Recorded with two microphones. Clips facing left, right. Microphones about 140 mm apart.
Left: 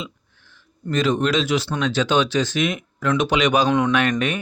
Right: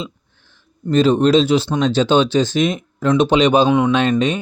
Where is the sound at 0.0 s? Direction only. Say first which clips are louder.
Right 4 dB; 30° right (ahead or behind).